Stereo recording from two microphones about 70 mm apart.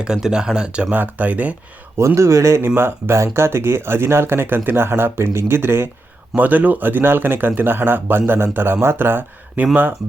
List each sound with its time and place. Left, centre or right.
0.0 s speech: centre
2.0 s speech: right
6.3 s speech: right